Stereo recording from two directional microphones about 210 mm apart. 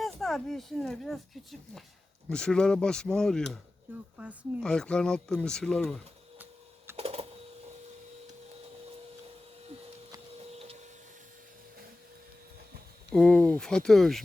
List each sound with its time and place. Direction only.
0.0 s speech: centre (ahead or behind)
6.9 s a sound: 30° right (ahead or behind)
10.3 s printer: 30° right (ahead or behind)
13.1 s speech: 5° left (ahead or behind)